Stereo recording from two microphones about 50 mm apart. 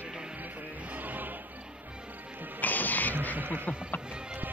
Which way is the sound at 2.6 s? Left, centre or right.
Left.